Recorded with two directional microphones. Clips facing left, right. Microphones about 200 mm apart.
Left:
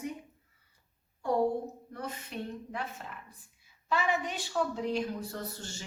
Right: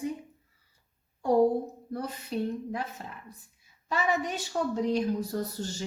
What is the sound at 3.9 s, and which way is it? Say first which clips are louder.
A woman's voice: right 2 dB; 40° right (ahead or behind).